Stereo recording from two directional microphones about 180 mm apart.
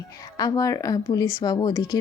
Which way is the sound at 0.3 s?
20° left (ahead or behind).